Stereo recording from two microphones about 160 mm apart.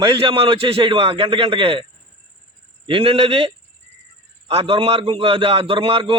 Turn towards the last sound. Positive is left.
turn(degrees=-35)  # may be behind; listen again after turning